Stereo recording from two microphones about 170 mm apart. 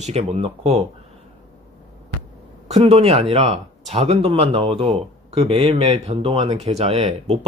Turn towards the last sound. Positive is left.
turn(degrees=-35)  # may be behind; listen again after turning